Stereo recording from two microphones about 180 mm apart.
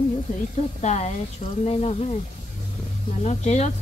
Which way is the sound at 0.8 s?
40° left (ahead or behind).